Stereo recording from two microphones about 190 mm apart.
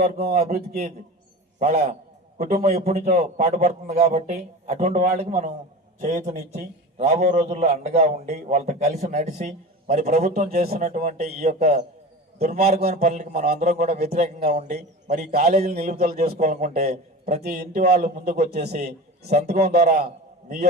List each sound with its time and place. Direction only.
0.0 s speech: 50° right (ahead or behind)
1.5 s a man's voice: 35° right (ahead or behind); by 10.8 s 50° right (ahead or behind)
10.8 s a man's voice: 40° right (ahead or behind)
16.4 s a man's voice: 40° right (ahead or behind)
17.2 s a man's voice: 55° right (ahead or behind)
19.3 s a man's voice: 35° right (ahead or behind)
19.5 s speech: 55° right (ahead or behind)